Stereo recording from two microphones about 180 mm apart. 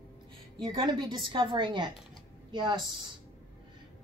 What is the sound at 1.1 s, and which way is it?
A woman's voice, 25° right (ahead or behind).